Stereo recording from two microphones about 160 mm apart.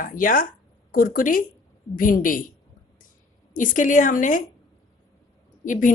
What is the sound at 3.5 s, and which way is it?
Speech, 55° left (ahead or behind).